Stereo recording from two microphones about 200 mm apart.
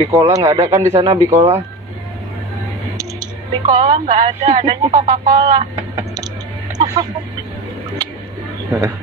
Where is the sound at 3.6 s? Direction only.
25° right (ahead or behind).